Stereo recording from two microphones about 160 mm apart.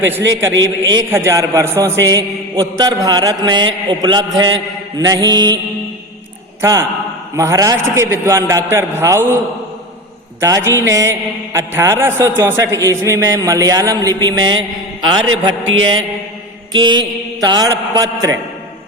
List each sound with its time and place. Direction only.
1.1 s a man's voice: 20° right (ahead or behind)
6.6 s a man's voice: 15° right (ahead or behind)
10.4 s a man's voice: 20° right (ahead or behind)